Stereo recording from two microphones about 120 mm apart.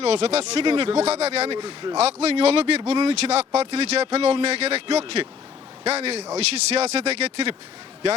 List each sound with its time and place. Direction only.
0.0 s speech: 60° right (ahead or behind)
1.5 s speech: 35° right (ahead or behind)
2.0 s speech: 65° right (ahead or behind)